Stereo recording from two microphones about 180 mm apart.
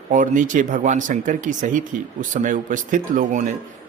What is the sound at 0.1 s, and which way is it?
Speech, 45° right (ahead or behind).